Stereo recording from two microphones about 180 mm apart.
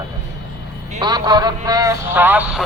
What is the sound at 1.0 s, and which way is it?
Speech, 20° right (ahead or behind).